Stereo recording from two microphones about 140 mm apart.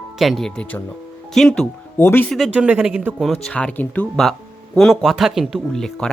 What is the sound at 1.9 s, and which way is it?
Speech, 15° left (ahead or behind).